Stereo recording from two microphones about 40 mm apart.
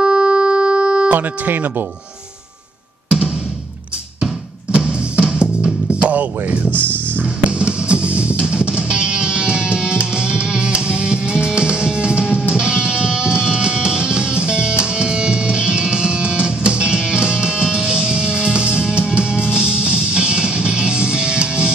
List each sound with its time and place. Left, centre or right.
0.0 s a sound: centre
1.0 s speech: right
4.7 s music: right
6.7 s speech: left
7.5 s music: right